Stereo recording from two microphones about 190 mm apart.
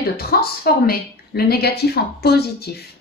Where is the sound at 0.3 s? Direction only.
55° left (ahead or behind).